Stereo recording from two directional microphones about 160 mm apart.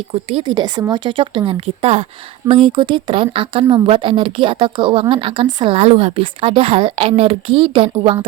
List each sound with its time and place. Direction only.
0.1 s a woman's voice: 35° right (ahead or behind)